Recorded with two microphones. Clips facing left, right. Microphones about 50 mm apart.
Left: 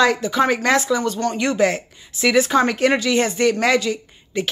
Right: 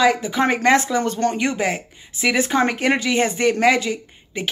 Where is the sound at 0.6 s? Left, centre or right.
Right.